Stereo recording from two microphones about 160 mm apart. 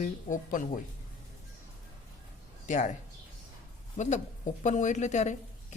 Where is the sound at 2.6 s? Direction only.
50° left (ahead or behind).